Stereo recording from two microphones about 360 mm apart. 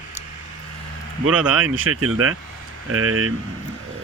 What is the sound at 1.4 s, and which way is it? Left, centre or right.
A man's voice, right.